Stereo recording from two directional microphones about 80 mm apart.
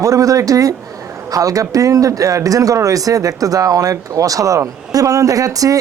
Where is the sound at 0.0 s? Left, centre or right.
Right.